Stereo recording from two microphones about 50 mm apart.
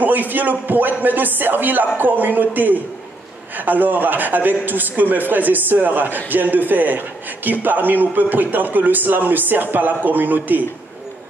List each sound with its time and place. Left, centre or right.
0.0 s a man's voice: right